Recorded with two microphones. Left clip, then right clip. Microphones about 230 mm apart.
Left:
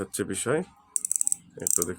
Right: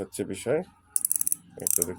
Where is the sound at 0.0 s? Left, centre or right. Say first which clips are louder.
Left 1 dB; left.